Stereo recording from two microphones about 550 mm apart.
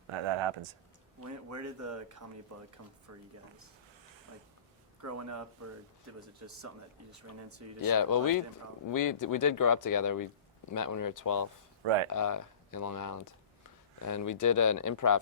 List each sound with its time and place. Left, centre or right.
0.1 s a sound: right
1.2 s speech: right
3.1 s speech: right
5.0 s speech: right
7.8 s speech: left
11.8 s speech: right
12.1 s speech: left